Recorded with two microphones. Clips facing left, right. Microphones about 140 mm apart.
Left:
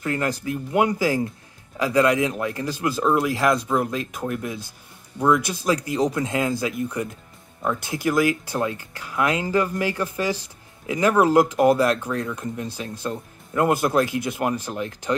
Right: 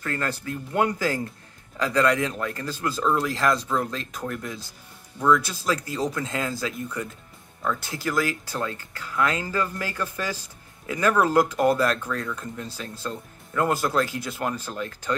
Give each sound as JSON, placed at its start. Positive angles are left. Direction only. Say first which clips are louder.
{"t": 0.0, "sound": "speech", "louder": "left 4 dB", "side_deg": 15}